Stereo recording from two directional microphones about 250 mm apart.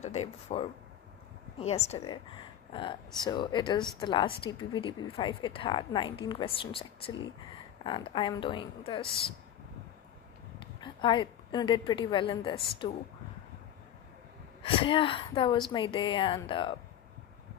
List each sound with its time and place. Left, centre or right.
0.0 s a woman's voice: left
10.6 s a woman's voice: centre
14.6 s a woman's voice: left